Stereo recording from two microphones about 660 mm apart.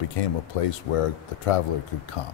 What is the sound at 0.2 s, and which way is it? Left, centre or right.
Speech, left.